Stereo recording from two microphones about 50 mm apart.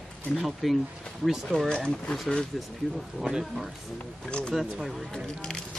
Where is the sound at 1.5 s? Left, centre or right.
Centre.